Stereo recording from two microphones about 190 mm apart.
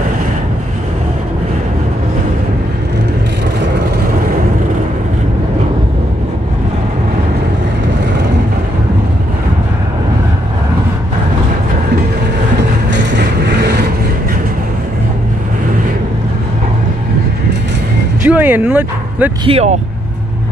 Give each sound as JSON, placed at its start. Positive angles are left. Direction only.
{"t": 13.1, "sound": "vehicle", "side_deg": -60}
{"t": 18.2, "sound": "a sound", "side_deg": -10}
{"t": 19.4, "sound": "speech", "side_deg": -35}